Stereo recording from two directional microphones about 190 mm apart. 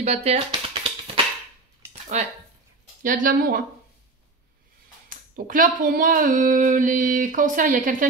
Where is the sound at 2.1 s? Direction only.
35° right (ahead or behind).